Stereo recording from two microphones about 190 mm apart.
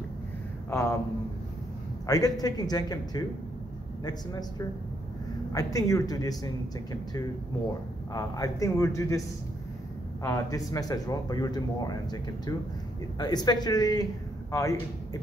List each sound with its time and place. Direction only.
0.7 s a man's voice: 15° left (ahead or behind)
2.0 s a man's voice: 20° left (ahead or behind)
10.2 s a man's voice: 15° left (ahead or behind)